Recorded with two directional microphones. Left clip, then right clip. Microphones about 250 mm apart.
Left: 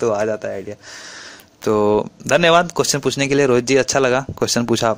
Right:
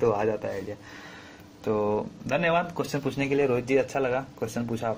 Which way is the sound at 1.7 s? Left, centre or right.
Left.